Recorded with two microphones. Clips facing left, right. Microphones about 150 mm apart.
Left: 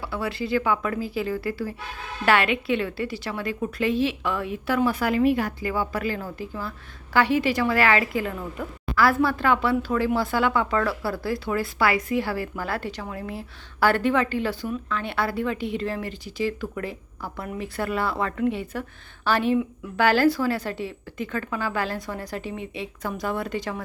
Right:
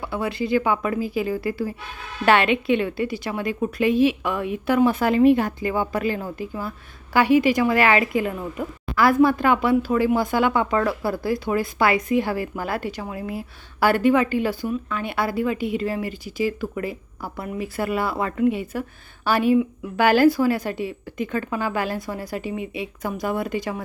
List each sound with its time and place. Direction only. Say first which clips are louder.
0.0 s speech: right 3 dB; 20° right (ahead or behind)